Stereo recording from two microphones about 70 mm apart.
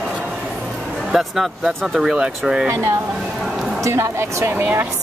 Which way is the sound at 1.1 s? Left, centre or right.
Centre.